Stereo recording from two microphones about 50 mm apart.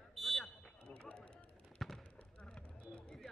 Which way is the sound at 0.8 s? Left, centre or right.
Left.